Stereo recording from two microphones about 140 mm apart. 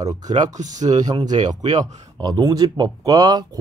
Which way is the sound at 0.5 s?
60° right (ahead or behind).